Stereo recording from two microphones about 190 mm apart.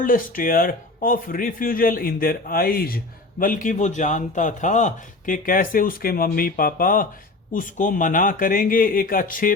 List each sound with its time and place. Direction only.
0.0 s a man's voice: 45° left (ahead or behind)